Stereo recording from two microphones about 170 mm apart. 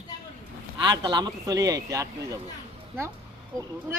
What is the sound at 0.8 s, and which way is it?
A man's voice, 25° right (ahead or behind).